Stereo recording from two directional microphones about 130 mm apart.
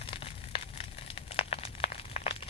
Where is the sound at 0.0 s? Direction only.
45° left (ahead or behind).